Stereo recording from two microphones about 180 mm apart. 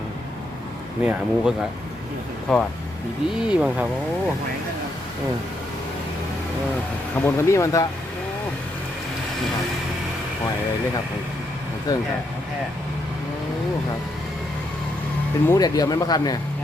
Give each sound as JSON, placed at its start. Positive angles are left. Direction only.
{"t": 1.0, "sound": "speech", "side_deg": -5}
{"t": 7.3, "sound": "speech", "side_deg": 15}
{"t": 11.9, "sound": "speech", "side_deg": 20}
{"t": 15.4, "sound": "speech", "side_deg": 20}